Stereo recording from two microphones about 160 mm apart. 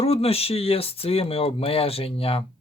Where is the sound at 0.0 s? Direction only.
40° left (ahead or behind).